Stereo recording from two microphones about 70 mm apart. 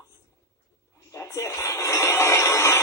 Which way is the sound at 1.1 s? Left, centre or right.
Left.